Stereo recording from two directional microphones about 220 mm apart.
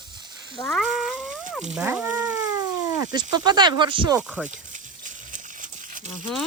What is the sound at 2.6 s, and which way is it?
Speech, 15° right (ahead or behind).